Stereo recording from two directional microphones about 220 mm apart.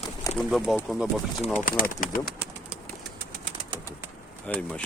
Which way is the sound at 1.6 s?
40° left (ahead or behind).